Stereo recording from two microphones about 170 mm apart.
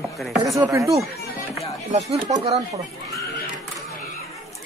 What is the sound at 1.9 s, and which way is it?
Speech, 40° right (ahead or behind).